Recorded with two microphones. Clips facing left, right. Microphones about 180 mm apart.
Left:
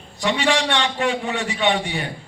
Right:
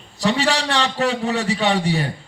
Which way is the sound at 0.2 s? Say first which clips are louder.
Right 1 dB; 35° right (ahead or behind).